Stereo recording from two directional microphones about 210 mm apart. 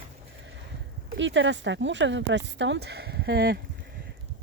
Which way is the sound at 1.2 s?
60° right (ahead or behind).